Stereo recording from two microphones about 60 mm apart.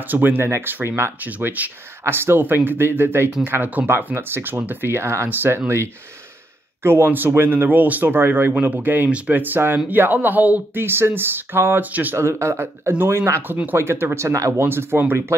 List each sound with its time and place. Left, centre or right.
0.0 s speech: right
2.0 s speech: right
3.6 s speech: right
4.0 s speech: right
6.8 s speech: right
11.8 s speech: right
12.2 s speech: right